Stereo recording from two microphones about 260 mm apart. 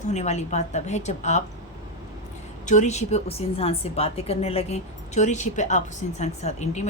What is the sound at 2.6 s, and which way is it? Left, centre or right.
A woman's voice, left.